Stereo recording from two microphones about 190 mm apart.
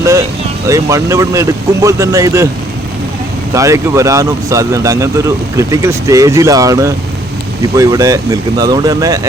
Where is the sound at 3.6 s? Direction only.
15° right (ahead or behind).